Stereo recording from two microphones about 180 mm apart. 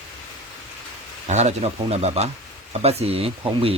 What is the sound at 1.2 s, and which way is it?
Speech, 40° right (ahead or behind).